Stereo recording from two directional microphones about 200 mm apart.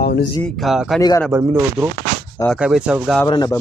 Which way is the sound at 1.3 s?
15° right (ahead or behind).